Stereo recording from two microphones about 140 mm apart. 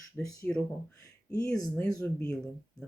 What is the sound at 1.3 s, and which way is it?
Speech, 5° left (ahead or behind).